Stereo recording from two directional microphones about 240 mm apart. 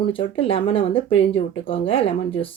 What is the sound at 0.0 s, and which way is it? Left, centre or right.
Speech, left.